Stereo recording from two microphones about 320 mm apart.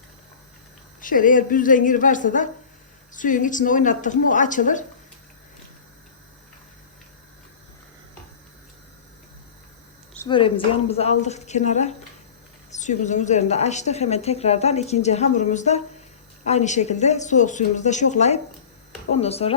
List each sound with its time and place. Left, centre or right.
1.0 s a woman's voice: left
10.2 s a woman's voice: centre